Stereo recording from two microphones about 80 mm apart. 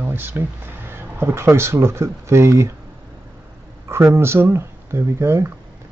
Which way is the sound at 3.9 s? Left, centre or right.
Right.